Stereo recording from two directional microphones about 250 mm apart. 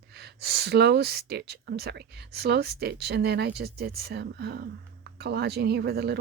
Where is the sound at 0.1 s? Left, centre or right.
Right.